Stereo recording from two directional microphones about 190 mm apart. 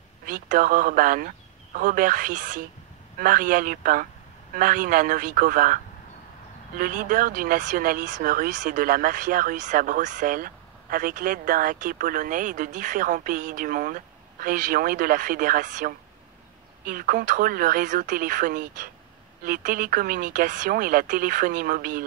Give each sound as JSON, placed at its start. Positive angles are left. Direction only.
{"t": 0.3, "sound": "speech", "side_deg": -45}
{"t": 6.8, "sound": "speech", "side_deg": -45}